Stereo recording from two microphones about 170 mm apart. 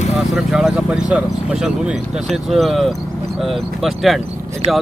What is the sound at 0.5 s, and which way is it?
Speech, 5° right (ahead or behind).